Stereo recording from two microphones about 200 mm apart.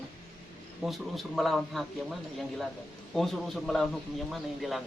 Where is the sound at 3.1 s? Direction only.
Centre (ahead or behind).